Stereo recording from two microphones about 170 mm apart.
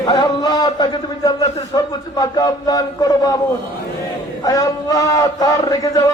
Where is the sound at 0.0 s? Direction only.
25° left (ahead or behind).